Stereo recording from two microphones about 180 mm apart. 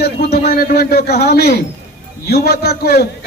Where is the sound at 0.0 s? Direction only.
60° left (ahead or behind).